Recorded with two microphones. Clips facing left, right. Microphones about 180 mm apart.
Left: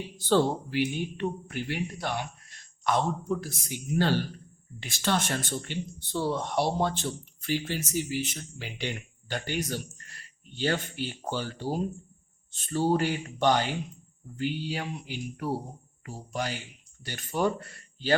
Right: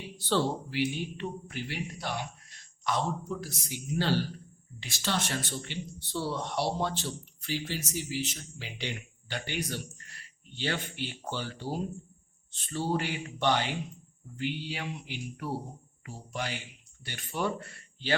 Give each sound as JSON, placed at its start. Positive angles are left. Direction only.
{"t": 0.3, "sound": "a man's voice", "side_deg": 50}